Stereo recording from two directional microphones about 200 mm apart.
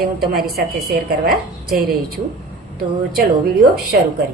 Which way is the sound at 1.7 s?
45° right (ahead or behind).